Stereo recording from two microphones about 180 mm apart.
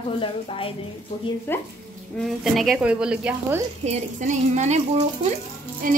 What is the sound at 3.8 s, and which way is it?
A woman's voice, 40° right (ahead or behind).